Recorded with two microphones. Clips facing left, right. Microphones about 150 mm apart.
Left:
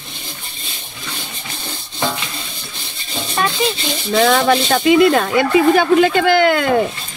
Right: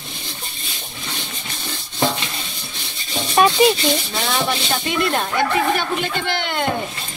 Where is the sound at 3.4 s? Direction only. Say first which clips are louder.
Right 5 dB; 15° right (ahead or behind).